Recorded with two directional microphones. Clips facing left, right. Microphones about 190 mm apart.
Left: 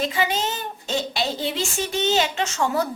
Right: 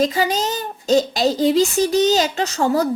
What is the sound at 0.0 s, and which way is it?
A child's voice, 40° right (ahead or behind).